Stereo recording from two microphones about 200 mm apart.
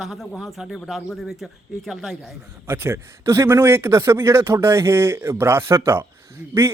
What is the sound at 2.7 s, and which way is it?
A man's voice, 10° right (ahead or behind).